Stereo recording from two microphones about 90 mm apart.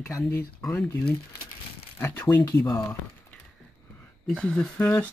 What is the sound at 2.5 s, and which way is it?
Speech, 40° left (ahead or behind).